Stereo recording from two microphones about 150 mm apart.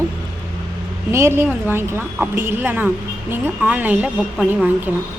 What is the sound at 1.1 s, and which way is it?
A woman's voice, 15° right (ahead or behind).